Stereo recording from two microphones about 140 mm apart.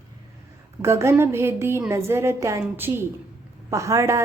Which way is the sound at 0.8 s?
20° right (ahead or behind).